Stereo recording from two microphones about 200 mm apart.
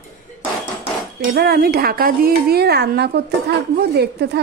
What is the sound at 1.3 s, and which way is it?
A woman's voice, 50° right (ahead or behind).